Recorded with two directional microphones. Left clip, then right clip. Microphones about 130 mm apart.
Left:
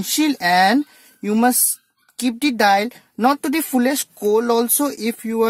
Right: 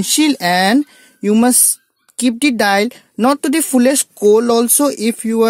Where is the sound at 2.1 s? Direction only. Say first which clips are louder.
Right 4 dB; 30° right (ahead or behind).